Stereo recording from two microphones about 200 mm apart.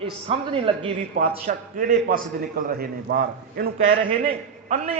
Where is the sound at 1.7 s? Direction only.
45° right (ahead or behind).